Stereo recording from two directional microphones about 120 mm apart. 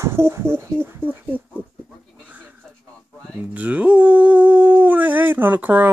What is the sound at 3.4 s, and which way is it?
Speech, 10° right (ahead or behind).